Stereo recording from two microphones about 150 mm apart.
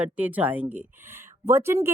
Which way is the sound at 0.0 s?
10° right (ahead or behind).